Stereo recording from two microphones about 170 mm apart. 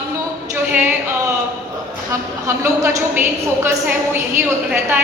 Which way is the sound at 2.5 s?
15° right (ahead or behind).